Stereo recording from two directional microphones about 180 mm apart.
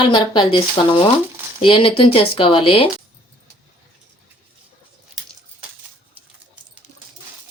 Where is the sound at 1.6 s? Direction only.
30° left (ahead or behind).